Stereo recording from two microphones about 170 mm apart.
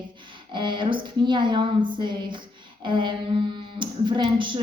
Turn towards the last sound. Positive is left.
turn(degrees=-30)  # may be behind; listen again after turning